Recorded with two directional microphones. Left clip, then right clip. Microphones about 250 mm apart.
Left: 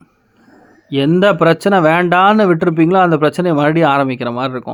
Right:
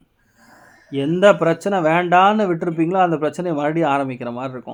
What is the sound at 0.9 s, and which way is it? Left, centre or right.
Speech, left.